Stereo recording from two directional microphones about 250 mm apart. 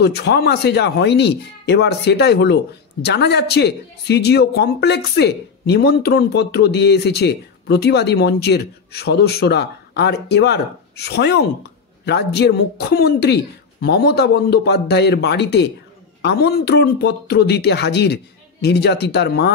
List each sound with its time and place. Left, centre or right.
0.0 s speech: left